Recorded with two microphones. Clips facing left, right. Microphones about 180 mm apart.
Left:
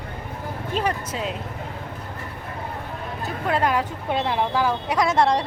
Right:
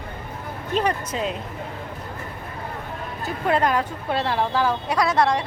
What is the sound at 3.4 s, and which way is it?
A woman's voice, 5° left (ahead or behind).